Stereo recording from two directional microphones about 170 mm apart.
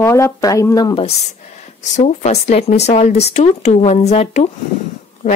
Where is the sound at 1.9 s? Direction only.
40° left (ahead or behind).